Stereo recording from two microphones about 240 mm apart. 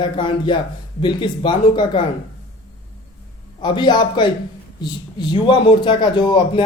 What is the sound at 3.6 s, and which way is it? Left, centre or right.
A man's voice, centre.